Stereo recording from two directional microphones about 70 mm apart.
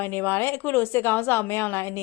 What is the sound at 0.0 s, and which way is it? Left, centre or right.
A woman's voice, left.